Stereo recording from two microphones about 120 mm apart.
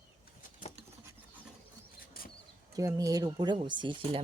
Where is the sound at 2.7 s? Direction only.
30° right (ahead or behind).